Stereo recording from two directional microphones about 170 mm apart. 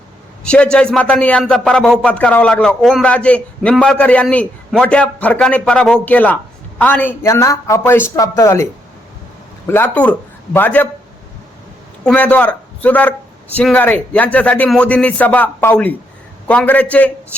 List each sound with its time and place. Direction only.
0.4 s a man's voice: 5° left (ahead or behind)
9.6 s speech: 10° left (ahead or behind)
12.0 s a man's voice: 10° left (ahead or behind)